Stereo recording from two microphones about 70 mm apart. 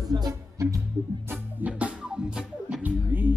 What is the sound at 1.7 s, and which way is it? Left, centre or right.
Music, centre.